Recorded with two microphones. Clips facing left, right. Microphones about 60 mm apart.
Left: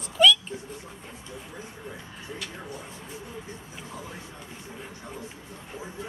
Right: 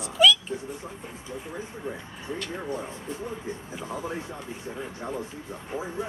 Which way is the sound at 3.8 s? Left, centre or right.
Right.